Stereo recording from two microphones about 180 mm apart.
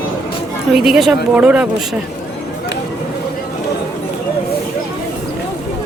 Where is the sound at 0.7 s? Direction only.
Centre (ahead or behind).